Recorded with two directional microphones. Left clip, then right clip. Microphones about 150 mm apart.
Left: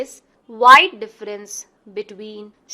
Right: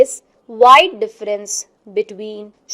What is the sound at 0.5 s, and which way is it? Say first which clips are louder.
A woman's voice: right 1 dB; 15° right (ahead or behind).